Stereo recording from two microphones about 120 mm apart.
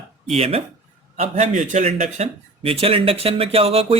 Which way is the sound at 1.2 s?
80° right.